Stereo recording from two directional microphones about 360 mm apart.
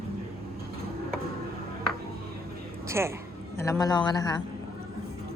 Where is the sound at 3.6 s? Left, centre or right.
Centre.